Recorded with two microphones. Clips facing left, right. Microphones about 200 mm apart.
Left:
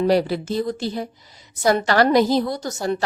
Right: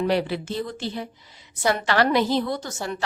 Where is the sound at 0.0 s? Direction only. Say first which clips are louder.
Left 5 dB; 40° left (ahead or behind).